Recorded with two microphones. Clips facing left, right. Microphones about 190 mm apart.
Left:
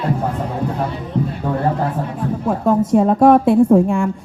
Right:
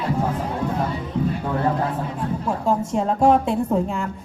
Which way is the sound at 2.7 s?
55° left (ahead or behind).